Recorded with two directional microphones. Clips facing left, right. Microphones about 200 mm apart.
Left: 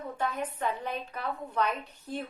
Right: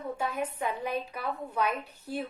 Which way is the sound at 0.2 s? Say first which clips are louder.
Left 2 dB; 10° right (ahead or behind).